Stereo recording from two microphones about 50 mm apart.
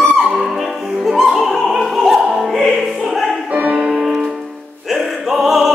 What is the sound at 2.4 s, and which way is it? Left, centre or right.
Music, centre.